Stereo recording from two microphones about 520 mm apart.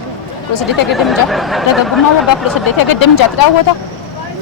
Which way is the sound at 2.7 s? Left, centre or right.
Left.